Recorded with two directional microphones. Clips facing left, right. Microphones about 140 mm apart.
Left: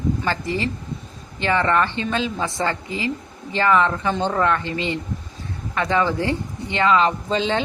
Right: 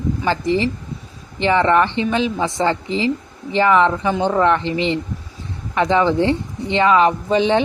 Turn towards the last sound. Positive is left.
turn(degrees=-15)  # may be behind; listen again after turning